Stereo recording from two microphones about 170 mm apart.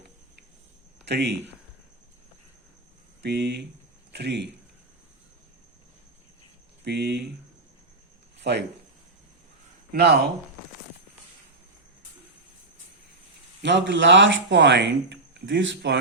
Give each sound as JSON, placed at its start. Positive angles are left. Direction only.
{"t": 1.0, "sound": "speech", "side_deg": -85}
{"t": 3.2, "sound": "speech", "side_deg": -75}
{"t": 6.8, "sound": "speech", "side_deg": -75}
{"t": 8.4, "sound": "speech", "side_deg": -90}
{"t": 9.9, "sound": "speech", "side_deg": -70}
{"t": 13.6, "sound": "speech", "side_deg": -90}